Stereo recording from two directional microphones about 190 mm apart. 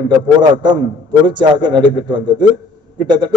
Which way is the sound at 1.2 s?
25° right (ahead or behind).